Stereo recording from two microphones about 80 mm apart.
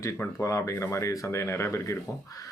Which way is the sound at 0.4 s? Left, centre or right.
Left.